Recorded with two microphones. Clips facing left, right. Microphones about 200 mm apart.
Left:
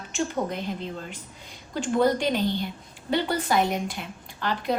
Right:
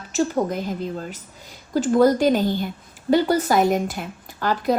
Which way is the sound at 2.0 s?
45° right (ahead or behind).